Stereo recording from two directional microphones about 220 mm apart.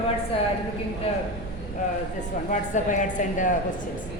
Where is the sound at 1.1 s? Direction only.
25° left (ahead or behind).